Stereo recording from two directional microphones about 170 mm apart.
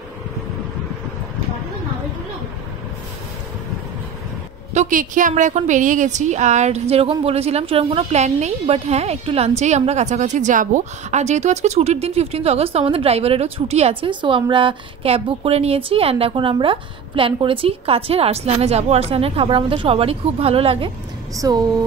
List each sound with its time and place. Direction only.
4.7 s a woman's voice: 50° right (ahead or behind); by 20.9 s 35° right (ahead or behind)
21.4 s speech: 20° right (ahead or behind)